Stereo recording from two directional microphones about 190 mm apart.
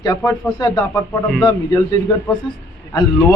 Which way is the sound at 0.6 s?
20° left (ahead or behind).